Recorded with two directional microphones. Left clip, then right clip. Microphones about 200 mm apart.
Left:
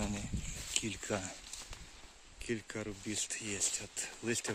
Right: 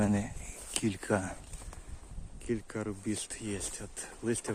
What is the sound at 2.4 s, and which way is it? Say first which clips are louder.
Speech: right 4 dB; 5° right (ahead or behind).